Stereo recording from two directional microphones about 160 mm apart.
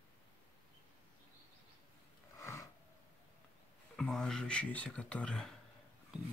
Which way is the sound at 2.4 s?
20° left (ahead or behind).